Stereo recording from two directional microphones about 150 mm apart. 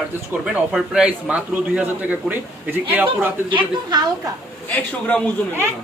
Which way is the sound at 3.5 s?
30° right (ahead or behind).